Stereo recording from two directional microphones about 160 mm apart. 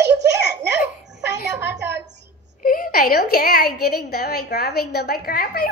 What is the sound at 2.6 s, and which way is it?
A woman's voice, 65° left (ahead or behind).